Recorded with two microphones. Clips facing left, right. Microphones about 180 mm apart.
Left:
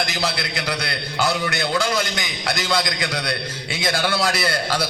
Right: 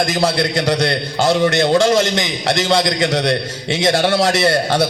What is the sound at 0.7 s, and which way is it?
A man's voice, 30° right (ahead or behind).